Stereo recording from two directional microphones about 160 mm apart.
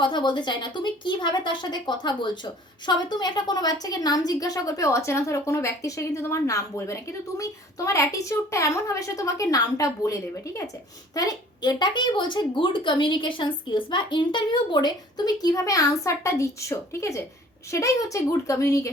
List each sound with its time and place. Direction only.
0.0 s a woman's voice: 30° left (ahead or behind)